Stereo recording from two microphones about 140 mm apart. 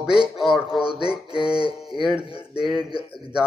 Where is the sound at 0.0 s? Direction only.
5° right (ahead or behind).